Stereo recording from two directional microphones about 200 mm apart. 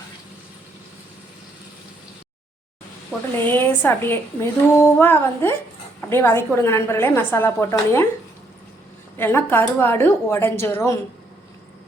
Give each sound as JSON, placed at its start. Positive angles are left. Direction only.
{"t": 3.1, "sound": "a woman's voice", "side_deg": 10}
{"t": 9.1, "sound": "a woman's voice", "side_deg": 10}